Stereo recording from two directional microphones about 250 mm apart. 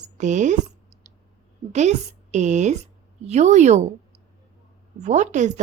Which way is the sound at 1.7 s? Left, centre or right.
Right.